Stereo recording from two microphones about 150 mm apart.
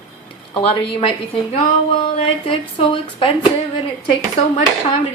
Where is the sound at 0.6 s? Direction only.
40° left (ahead or behind).